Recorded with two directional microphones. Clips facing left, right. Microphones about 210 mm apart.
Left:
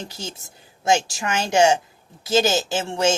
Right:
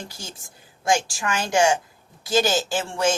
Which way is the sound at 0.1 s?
25° left (ahead or behind).